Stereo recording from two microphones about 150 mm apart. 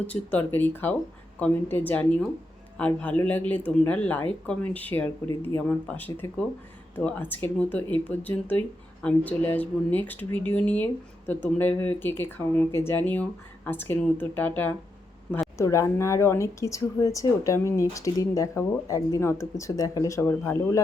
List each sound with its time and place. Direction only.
0.1 s speech: 10° left (ahead or behind)